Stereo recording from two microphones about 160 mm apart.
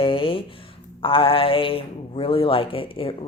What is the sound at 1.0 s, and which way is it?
Speech, 35° left (ahead or behind).